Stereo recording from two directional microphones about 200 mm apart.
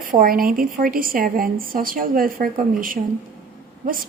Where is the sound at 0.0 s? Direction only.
45° right (ahead or behind).